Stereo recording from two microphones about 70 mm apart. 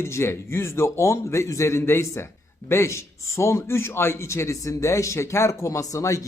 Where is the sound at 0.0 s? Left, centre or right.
Left.